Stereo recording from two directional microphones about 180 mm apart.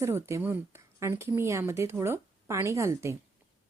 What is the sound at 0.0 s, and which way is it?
A woman's voice, 15° right (ahead or behind).